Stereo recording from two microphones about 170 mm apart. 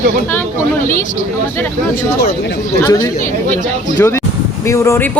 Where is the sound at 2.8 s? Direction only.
20° left (ahead or behind).